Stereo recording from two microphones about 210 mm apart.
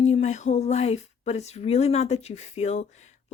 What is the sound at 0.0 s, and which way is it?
Speech, 30° left (ahead or behind).